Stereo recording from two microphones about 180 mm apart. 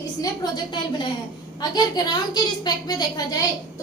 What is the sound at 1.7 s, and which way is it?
Child singing, 25° left (ahead or behind).